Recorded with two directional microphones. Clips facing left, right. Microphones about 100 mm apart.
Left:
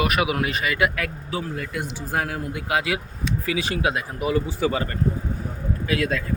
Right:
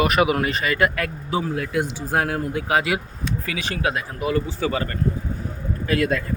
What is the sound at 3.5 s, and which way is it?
Speech, 15° left (ahead or behind).